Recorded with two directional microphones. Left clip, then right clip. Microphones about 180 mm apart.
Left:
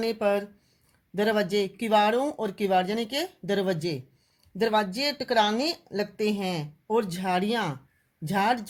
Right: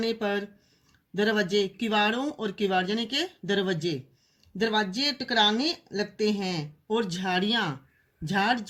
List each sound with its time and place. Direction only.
0.0 s speech: 50° left (ahead or behind)